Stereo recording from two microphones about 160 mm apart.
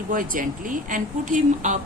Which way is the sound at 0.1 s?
60° right (ahead or behind).